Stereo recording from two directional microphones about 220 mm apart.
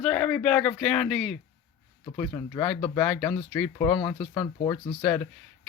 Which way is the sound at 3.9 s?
20° left (ahead or behind).